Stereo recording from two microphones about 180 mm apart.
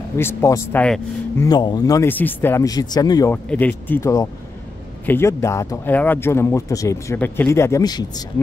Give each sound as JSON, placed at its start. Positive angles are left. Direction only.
{"t": 0.2, "sound": "speech", "side_deg": 15}
{"t": 3.4, "sound": "speech", "side_deg": 10}